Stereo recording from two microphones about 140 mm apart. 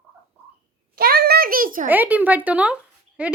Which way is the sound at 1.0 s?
90° right.